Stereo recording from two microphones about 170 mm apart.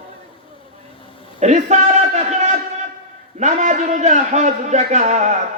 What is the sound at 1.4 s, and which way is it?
A man's voice, 45° right (ahead or behind).